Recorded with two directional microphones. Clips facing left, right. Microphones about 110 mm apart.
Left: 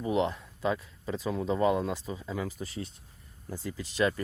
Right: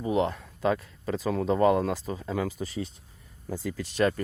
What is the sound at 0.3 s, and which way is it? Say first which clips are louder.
Speech: right 4 dB; 50° right (ahead or behind).